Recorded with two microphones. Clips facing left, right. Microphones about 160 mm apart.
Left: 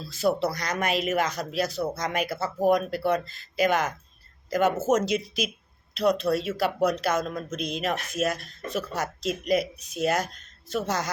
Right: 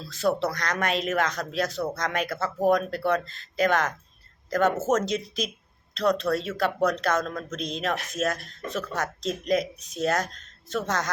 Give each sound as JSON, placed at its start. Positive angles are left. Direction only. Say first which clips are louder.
{"t": 0.1, "sound": "speech", "louder": "even", "side_deg": 5}